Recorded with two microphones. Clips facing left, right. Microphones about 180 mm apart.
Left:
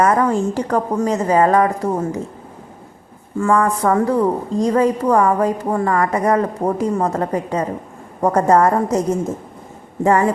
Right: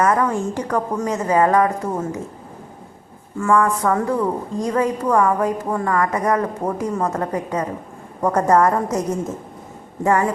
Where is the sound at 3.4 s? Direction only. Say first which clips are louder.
Left 1 dB; 35° left (ahead or behind).